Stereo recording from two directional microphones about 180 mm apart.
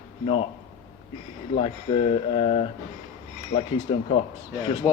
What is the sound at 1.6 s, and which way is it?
Speech, 30° left (ahead or behind).